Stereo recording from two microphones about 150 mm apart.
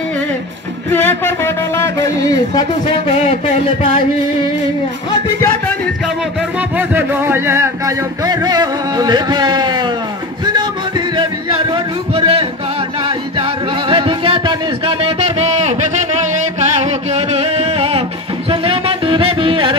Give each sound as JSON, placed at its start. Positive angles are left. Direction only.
{"t": 0.8, "sound": "a sound", "side_deg": 10}
{"t": 6.9, "sound": "speech", "side_deg": -15}
{"t": 11.1, "sound": "music", "side_deg": -35}